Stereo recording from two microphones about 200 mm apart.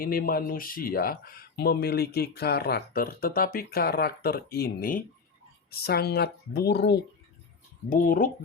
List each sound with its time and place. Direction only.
0.0 s speech: 45° left (ahead or behind)
7.9 s speech: 45° left (ahead or behind)